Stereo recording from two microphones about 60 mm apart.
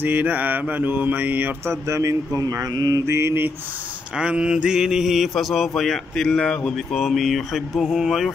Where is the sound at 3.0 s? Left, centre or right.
Right.